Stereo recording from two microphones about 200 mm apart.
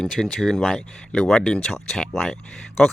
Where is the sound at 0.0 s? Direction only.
Centre (ahead or behind).